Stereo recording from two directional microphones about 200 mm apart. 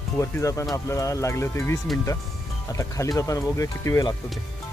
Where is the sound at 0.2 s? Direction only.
15° left (ahead or behind).